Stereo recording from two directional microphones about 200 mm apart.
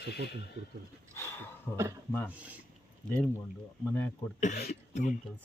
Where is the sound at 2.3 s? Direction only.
5° right (ahead or behind).